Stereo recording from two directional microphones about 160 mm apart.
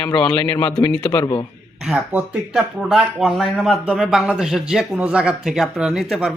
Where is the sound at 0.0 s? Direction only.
30° left (ahead or behind).